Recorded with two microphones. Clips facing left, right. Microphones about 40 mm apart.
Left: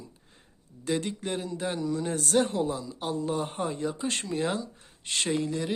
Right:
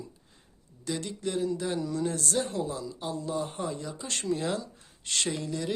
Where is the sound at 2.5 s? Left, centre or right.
Left.